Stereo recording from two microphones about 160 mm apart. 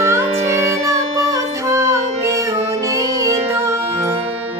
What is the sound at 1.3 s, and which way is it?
Music, 20° right (ahead or behind).